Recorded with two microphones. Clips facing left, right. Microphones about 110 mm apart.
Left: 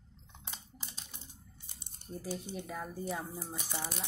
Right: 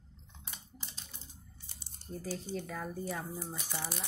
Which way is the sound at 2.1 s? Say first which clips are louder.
Right 1 dB; 15° left (ahead or behind).